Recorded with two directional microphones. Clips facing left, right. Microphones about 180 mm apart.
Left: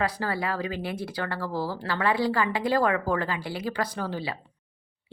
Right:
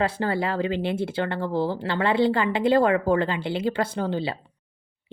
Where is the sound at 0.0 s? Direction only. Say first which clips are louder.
Right 4 dB; 25° right (ahead or behind).